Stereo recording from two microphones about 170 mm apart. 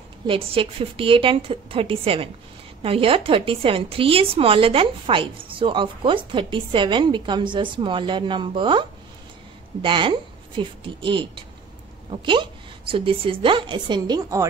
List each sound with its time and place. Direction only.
0.3 s a woman's voice: 30° right (ahead or behind)